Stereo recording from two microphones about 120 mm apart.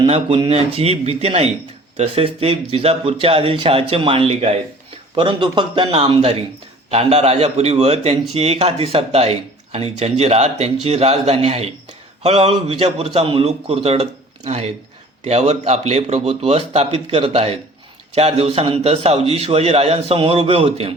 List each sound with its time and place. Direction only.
0.1 s a man's voice: 50° right (ahead or behind)
5.1 s a man's voice: 45° right (ahead or behind)